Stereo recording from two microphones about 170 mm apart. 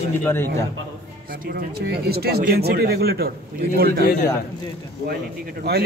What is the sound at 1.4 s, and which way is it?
Speech, 65° right (ahead or behind).